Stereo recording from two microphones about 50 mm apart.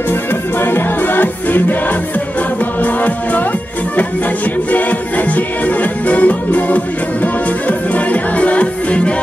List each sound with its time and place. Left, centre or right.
0.6 s music: left
2.8 s music: left
4.6 s music: left